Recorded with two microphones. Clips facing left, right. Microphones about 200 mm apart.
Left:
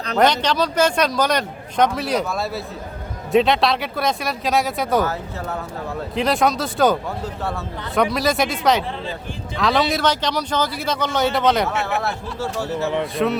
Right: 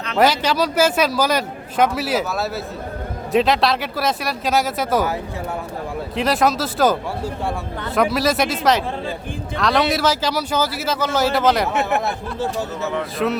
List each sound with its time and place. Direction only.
0.2 s a man's voice: 5° right (ahead or behind)
6.1 s a man's voice: centre (ahead or behind)
7.9 s a man's voice: centre (ahead or behind)
11.7 s speech: 20° right (ahead or behind)
12.8 s speech: 20° left (ahead or behind)